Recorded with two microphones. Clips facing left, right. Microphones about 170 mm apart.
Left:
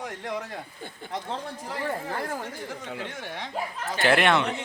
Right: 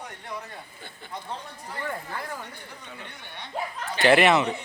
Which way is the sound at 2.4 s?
90° left.